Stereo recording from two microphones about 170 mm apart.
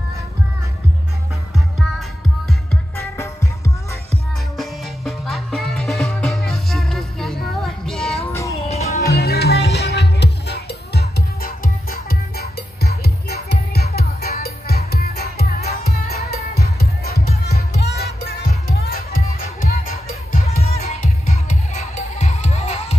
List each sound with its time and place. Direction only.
1.5 s music: centre (ahead or behind)
3.0 s music: 15° left (ahead or behind)
4.6 s music: centre (ahead or behind)
8.3 s music: 15° left (ahead or behind)
8.6 s music: 40° left (ahead or behind)
9.1 s music: 65° left (ahead or behind)
20.4 s music: 35° left (ahead or behind)